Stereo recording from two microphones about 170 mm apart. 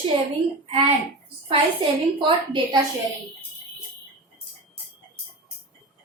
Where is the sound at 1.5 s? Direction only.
30° right (ahead or behind).